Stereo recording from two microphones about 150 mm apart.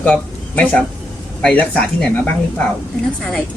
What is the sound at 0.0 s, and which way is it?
Speech, 10° left (ahead or behind).